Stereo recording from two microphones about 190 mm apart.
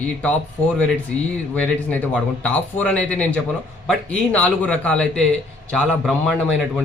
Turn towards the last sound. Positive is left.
turn(degrees=0)  # may be behind; listen again after turning